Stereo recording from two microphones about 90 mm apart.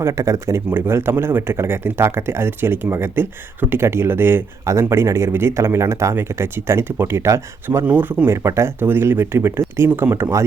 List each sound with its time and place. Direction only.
0.0 s speech: 35° right (ahead or behind)
7.9 s speech: 20° right (ahead or behind)
8.4 s speech: 30° right (ahead or behind)